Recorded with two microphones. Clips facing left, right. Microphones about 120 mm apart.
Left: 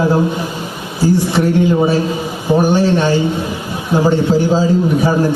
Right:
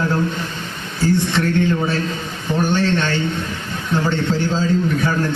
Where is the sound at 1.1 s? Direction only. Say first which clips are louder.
Left 5 dB; 10° left (ahead or behind).